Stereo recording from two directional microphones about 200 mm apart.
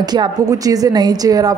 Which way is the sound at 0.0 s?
20° right (ahead or behind).